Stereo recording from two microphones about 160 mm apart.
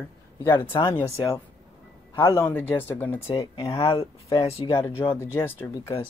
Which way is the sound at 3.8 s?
25° left (ahead or behind).